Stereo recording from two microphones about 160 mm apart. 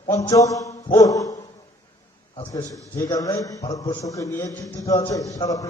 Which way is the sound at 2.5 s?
20° left (ahead or behind).